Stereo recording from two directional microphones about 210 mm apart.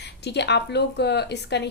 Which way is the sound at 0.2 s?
55° left (ahead or behind).